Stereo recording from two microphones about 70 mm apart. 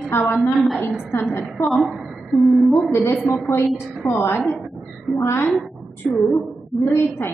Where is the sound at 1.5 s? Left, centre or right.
Centre.